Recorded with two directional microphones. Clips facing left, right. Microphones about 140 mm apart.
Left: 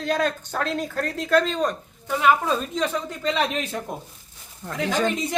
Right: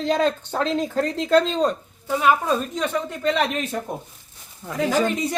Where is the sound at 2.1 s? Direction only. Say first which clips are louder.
Right 1 dB; 10° right (ahead or behind).